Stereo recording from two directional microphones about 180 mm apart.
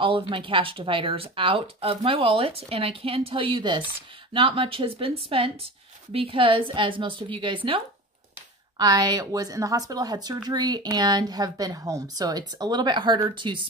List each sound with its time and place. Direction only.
0.0 s a woman's voice: 30° right (ahead or behind)